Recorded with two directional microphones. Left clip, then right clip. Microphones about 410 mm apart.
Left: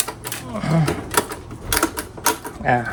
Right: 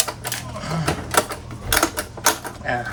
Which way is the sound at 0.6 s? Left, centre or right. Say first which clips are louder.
Left 9 dB; centre.